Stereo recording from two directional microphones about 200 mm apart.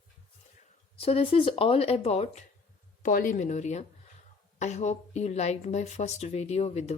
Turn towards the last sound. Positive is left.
turn(degrees=30)  # may be behind; listen again after turning